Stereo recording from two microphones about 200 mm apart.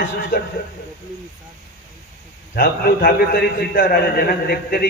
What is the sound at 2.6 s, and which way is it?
A man's voice, 45° left (ahead or behind).